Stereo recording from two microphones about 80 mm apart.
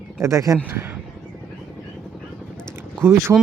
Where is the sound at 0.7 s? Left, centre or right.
Right.